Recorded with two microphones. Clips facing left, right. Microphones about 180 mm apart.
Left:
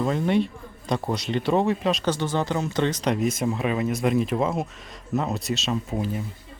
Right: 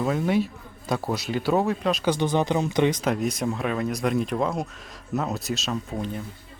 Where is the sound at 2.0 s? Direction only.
15° right (ahead or behind).